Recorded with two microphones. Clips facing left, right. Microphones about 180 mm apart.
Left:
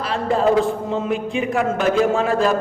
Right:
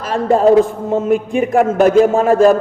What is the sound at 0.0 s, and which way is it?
A man's voice, 45° right (ahead or behind).